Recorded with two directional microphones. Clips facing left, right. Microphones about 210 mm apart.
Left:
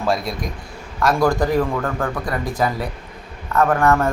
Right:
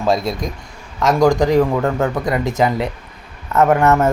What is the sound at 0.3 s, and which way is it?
Speech, 25° right (ahead or behind).